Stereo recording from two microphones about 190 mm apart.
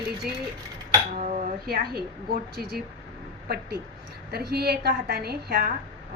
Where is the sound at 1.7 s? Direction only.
55° right (ahead or behind).